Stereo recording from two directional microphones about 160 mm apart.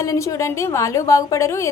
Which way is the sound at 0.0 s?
20° left (ahead or behind).